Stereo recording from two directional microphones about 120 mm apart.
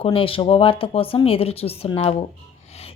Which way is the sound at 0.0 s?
50° left (ahead or behind).